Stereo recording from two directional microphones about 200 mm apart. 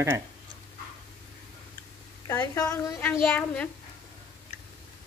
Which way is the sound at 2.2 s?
15° left (ahead or behind).